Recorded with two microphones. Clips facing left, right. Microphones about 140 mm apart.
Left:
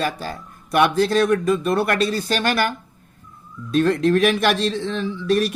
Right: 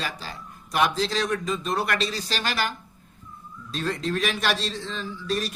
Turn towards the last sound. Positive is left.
turn(degrees=60)  # may be behind; listen again after turning